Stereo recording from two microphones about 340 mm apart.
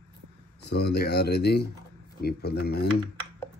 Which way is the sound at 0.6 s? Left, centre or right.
Left.